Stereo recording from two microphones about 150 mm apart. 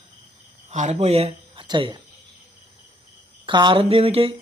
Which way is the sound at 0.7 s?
50° right (ahead or behind).